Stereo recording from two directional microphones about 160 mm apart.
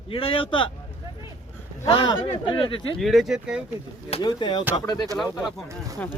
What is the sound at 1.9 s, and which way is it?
Speech, 30° left (ahead or behind).